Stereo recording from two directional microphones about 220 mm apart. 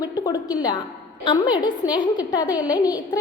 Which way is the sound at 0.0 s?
15° left (ahead or behind).